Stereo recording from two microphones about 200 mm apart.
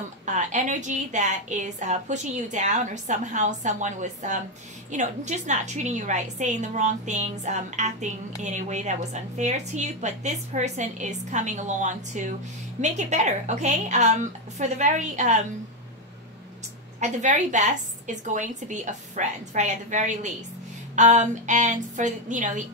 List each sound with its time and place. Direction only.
0.2 s a woman's voice: 35° right (ahead or behind)
17.0 s a woman's voice: 35° right (ahead or behind)